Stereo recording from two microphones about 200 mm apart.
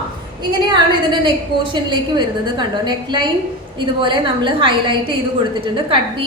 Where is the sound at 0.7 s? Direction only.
25° right (ahead or behind).